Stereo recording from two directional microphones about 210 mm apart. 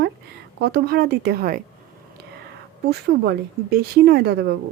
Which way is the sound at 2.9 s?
50° right (ahead or behind).